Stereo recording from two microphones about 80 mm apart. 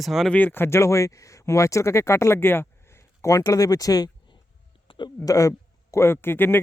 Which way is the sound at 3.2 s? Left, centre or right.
Left.